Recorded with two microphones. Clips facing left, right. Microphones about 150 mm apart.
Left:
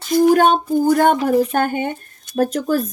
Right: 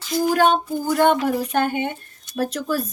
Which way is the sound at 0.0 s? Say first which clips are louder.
Left 5 dB; 50° left (ahead or behind).